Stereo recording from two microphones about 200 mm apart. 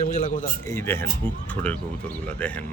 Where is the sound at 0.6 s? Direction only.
15° left (ahead or behind).